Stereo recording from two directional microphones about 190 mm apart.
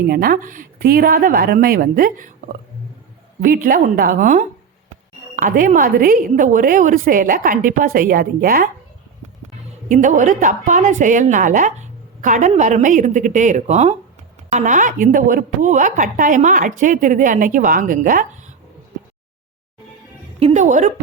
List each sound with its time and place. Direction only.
0.1 s a woman's voice: 50° right (ahead or behind)
3.4 s a woman's voice: 45° right (ahead or behind)
9.9 s a woman's voice: 40° right (ahead or behind)
20.4 s a woman's voice: 40° right (ahead or behind)